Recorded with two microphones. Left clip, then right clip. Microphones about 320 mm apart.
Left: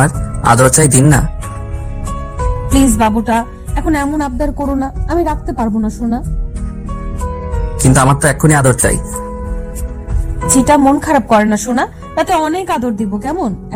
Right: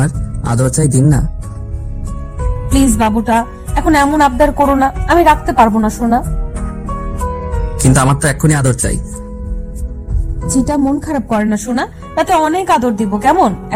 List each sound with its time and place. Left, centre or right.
0.0 s speech: left
2.0 s speech: centre; by 6.7 s right
6.8 s music: centre; by 9.2 s left
10.4 s a woman's voice: left; by 13.7 s right